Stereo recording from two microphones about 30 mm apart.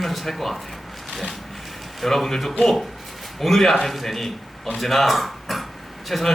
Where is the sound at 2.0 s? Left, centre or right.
Centre.